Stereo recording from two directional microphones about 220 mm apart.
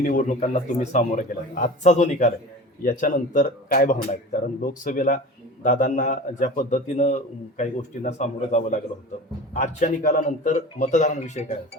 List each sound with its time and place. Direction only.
0.0 s a man's voice: 35° left (ahead or behind)